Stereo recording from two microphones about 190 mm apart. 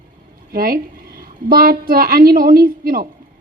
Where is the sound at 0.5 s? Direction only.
50° right (ahead or behind).